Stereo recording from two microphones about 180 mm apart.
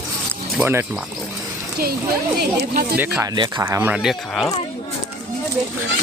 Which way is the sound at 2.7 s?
50° right (ahead or behind).